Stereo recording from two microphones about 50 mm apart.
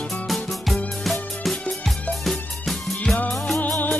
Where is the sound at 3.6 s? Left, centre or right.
Left.